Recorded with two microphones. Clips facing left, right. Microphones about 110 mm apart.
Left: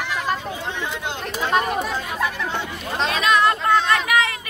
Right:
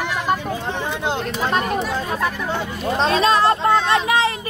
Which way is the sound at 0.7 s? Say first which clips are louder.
Right 5 dB; 40° right (ahead or behind).